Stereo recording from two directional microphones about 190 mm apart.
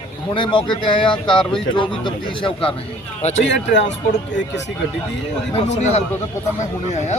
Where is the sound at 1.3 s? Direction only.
5° left (ahead or behind).